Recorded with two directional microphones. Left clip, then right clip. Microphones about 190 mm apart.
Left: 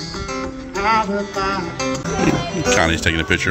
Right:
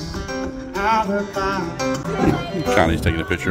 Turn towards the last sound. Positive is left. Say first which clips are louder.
# left 5 dB
turn(degrees=-10)  # may be behind; listen again after turning